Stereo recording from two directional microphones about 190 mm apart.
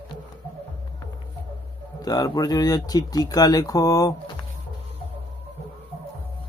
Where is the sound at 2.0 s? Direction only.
20° left (ahead or behind).